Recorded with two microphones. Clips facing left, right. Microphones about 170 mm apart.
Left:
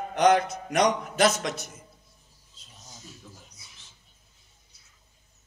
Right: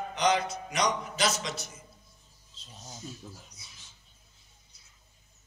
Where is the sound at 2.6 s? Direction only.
25° right (ahead or behind).